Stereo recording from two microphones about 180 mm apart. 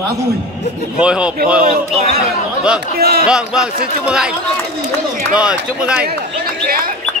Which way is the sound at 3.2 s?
5° right (ahead or behind).